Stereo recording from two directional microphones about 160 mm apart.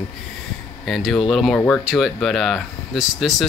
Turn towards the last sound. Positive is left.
turn(degrees=0)  # may be behind; listen again after turning